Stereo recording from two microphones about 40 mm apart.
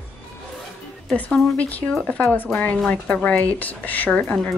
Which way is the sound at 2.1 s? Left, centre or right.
Left.